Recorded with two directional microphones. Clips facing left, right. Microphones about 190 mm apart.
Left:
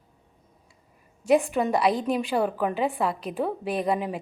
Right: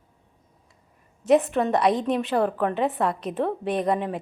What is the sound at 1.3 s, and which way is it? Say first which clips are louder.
A woman's voice: right 2 dB; 5° left (ahead or behind).